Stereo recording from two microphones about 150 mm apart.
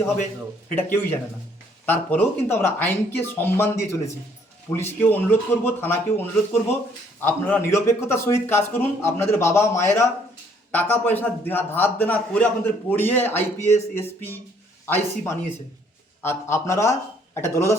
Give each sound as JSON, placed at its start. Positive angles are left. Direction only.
{"t": 0.7, "sound": "a man's voice", "side_deg": 15}